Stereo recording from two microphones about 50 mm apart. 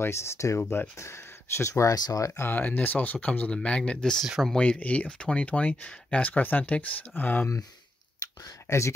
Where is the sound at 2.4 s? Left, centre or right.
Left.